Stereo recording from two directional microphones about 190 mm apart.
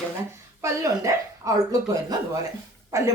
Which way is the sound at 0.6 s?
15° right (ahead or behind).